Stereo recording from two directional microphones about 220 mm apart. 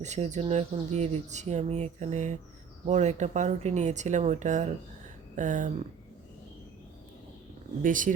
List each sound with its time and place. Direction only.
0.0 s speech: 30° right (ahead or behind)
7.8 s speech: 35° right (ahead or behind)